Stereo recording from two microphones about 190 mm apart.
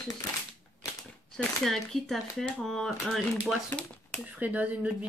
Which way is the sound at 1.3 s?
Centre (ahead or behind).